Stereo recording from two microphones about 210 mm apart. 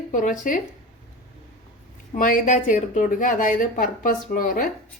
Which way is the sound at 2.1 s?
40° left (ahead or behind).